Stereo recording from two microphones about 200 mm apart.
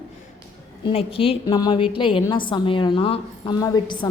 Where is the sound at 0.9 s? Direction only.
30° left (ahead or behind).